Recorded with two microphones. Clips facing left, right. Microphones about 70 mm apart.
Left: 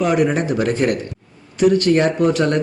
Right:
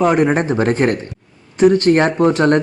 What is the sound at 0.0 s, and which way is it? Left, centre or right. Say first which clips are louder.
Speech: right 3 dB; right.